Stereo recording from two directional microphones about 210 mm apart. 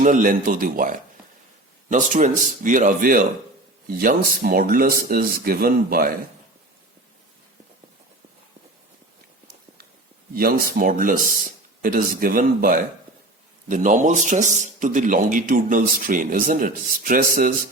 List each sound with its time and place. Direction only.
0.0 s a man's voice: 40° right (ahead or behind)
10.3 s a man's voice: 45° right (ahead or behind)